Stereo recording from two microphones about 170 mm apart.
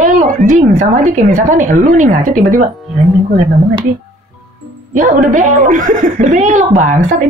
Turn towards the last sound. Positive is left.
turn(degrees=-45)  # may be behind; listen again after turning